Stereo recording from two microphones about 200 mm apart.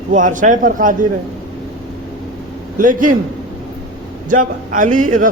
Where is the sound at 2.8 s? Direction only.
40° right (ahead or behind).